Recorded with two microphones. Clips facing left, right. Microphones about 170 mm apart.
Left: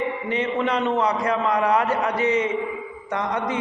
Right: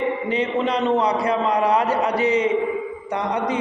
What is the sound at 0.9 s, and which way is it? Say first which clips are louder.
A man's voice: right 2 dB; 35° right (ahead or behind).